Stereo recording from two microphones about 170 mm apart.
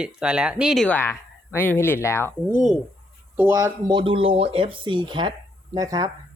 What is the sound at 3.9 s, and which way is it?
Speech, 30° right (ahead or behind).